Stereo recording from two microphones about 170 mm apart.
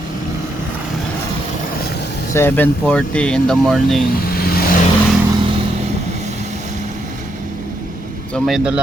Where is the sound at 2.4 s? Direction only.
10° left (ahead or behind).